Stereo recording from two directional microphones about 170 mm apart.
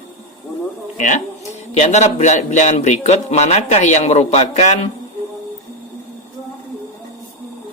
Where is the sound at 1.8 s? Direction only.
45° left (ahead or behind).